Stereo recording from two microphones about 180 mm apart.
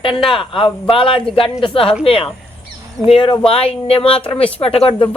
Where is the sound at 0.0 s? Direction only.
30° left (ahead or behind).